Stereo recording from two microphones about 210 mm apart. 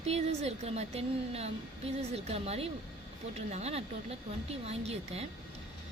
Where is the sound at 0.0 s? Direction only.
30° right (ahead or behind).